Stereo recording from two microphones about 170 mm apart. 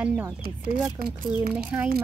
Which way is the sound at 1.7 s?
15° right (ahead or behind).